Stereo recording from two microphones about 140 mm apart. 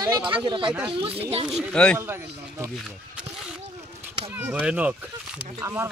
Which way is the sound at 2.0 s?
15° right (ahead or behind).